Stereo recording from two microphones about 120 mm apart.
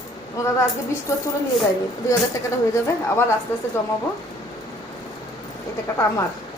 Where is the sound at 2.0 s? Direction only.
25° left (ahead or behind).